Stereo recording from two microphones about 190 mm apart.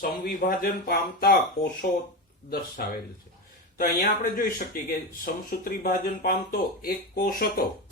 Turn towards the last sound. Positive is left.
turn(degrees=50)  # may be behind; listen again after turning